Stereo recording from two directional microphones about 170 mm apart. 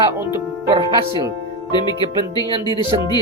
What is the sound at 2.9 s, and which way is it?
Speech, 25° right (ahead or behind).